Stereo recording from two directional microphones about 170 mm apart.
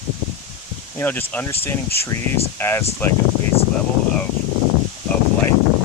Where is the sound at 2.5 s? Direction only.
15° left (ahead or behind).